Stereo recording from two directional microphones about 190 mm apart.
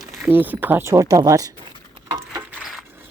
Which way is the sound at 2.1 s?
15° right (ahead or behind).